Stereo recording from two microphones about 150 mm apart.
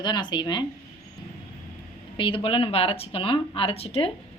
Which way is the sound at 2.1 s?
35° left (ahead or behind).